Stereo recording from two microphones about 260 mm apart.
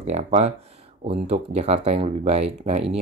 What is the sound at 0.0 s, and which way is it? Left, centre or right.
Speech, right.